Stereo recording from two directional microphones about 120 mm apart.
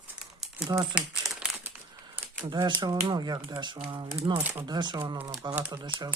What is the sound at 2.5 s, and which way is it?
Speech, 35° right (ahead or behind).